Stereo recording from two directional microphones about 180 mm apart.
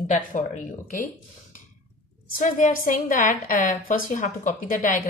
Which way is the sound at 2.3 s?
50° left (ahead or behind).